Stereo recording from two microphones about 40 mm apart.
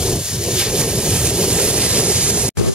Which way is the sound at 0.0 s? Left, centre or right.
Centre.